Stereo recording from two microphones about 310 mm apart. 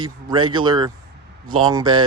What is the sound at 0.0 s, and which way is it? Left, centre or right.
Speech, centre.